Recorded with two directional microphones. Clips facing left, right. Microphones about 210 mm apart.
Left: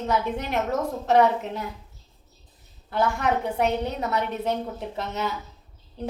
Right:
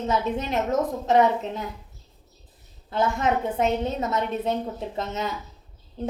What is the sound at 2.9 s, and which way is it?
A woman's voice, 20° right (ahead or behind).